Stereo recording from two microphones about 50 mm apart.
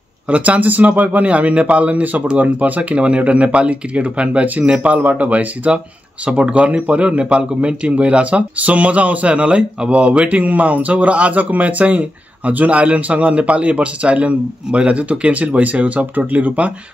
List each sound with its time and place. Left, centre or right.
0.3 s a man's voice: right